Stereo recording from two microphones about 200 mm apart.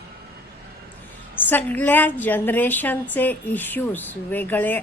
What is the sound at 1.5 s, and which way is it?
A woman's voice, 10° left (ahead or behind).